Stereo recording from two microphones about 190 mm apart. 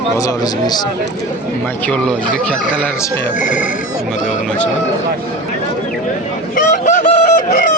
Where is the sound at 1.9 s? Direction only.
5° left (ahead or behind).